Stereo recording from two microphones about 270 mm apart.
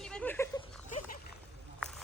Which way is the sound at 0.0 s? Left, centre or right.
Centre.